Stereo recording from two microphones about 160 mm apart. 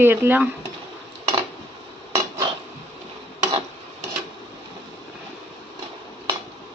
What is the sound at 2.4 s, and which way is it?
Dishes, 30° right (ahead or behind).